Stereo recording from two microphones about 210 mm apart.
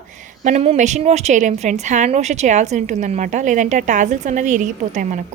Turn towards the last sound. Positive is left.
turn(degrees=-35)  # may be behind; listen again after turning